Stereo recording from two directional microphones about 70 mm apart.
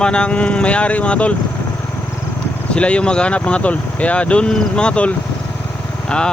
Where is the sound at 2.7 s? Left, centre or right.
Centre.